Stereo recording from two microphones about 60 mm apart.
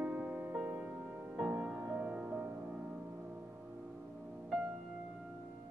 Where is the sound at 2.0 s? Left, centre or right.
Right.